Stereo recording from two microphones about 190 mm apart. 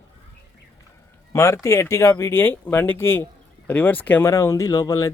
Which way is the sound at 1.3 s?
15° left (ahead or behind).